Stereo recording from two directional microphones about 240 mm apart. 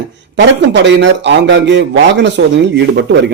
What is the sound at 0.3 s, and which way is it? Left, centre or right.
A man's voice, right.